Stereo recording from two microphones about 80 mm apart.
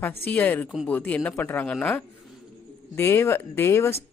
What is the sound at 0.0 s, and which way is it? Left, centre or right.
A man's voice, left.